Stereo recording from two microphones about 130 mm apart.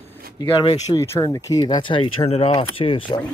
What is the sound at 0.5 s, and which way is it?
Speech, 35° left (ahead or behind).